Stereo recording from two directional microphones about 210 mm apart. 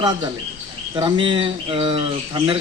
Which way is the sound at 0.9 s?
25° right (ahead or behind).